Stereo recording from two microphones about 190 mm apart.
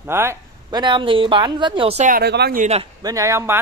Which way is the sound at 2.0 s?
55° right (ahead or behind).